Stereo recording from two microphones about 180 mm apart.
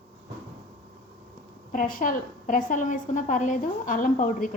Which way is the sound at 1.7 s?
50° left (ahead or behind).